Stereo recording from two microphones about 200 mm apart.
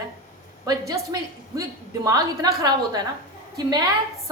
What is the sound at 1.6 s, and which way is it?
A woman's voice, 15° right (ahead or behind).